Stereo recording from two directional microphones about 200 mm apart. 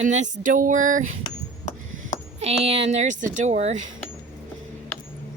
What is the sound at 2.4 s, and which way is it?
Speech, 30° right (ahead or behind).